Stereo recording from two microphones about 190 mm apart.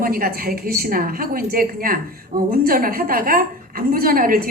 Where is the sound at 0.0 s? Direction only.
50° right (ahead or behind).